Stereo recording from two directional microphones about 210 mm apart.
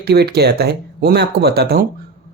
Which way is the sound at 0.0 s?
50° right (ahead or behind).